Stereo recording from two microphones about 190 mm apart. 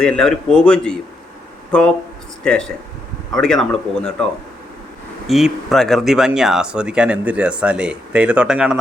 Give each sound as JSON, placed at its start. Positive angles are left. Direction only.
{"t": 0.0, "sound": "speech", "side_deg": 5}
{"t": 5.3, "sound": "speech", "side_deg": 0}